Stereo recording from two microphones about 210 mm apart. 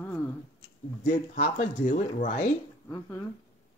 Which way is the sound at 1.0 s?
40° left (ahead or behind).